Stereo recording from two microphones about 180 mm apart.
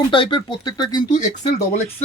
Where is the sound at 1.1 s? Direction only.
40° left (ahead or behind).